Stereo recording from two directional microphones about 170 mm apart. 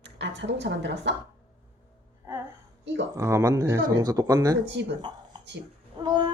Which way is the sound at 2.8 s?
90° right.